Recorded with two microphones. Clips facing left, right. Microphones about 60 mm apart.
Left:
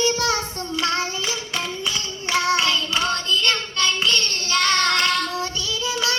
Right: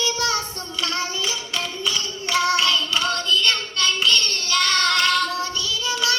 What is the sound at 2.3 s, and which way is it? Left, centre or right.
Child singing, left.